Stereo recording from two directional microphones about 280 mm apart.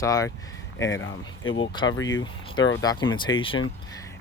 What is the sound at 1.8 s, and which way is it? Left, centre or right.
Speech, left.